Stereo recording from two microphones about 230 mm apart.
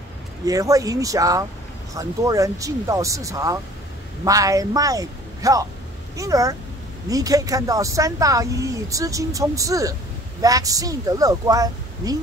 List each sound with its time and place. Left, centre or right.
0.5 s speech: centre